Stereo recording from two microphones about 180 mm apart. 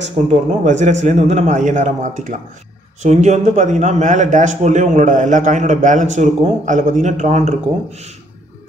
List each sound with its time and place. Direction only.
0.0 s a man's voice: 40° right (ahead or behind)